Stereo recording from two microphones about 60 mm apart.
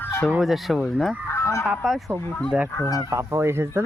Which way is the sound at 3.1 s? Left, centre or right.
Right.